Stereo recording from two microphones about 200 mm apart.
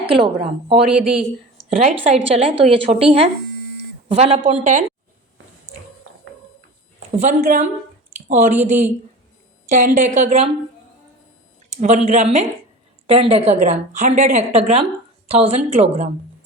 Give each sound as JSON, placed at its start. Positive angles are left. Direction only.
{"t": 0.1, "sound": "a woman's voice", "side_deg": -25}
{"t": 0.9, "sound": "speech", "side_deg": -5}
{"t": 1.7, "sound": "a woman's voice", "side_deg": -30}
{"t": 7.2, "sound": "a woman's voice", "side_deg": -40}
{"t": 12.0, "sound": "a woman's voice", "side_deg": -35}